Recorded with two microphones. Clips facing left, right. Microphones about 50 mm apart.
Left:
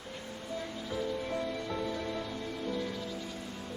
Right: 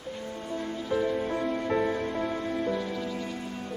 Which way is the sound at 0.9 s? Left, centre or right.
Right.